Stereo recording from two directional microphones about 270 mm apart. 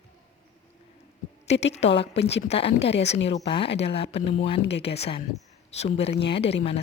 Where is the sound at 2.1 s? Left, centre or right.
Left.